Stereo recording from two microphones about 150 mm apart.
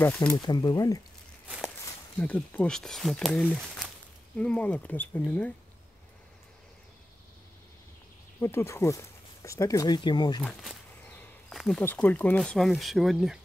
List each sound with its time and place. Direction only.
0.0 s speech: 10° left (ahead or behind)
0.4 s speech: 30° left (ahead or behind)
2.1 s speech: 10° left (ahead or behind)
8.4 s speech: 15° left (ahead or behind)
10.4 s speech: centre (ahead or behind)
11.1 s a sound: 10° left (ahead or behind)
11.8 s speech: 10° left (ahead or behind)